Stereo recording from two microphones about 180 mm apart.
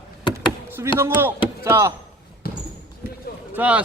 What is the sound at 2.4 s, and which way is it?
Basketball bounce, 55° left (ahead or behind).